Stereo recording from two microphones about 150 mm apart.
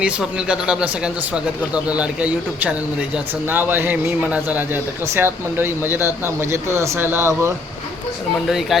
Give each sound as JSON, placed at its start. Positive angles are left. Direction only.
{"t": 0.0, "sound": "a man's voice", "side_deg": -5}
{"t": 8.4, "sound": "speech", "side_deg": 0}